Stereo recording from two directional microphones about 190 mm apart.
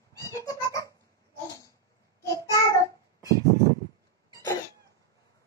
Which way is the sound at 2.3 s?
15° left (ahead or behind).